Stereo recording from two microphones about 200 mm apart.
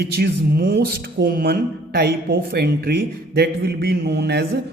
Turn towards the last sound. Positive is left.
turn(degrees=-55)  # may be behind; listen again after turning